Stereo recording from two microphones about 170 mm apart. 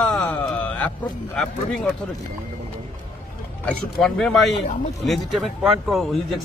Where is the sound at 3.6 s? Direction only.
5° left (ahead or behind).